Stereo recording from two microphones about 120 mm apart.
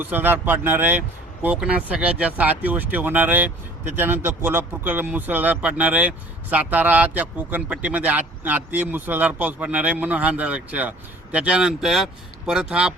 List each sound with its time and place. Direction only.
0.0 s speech: 15° right (ahead or behind)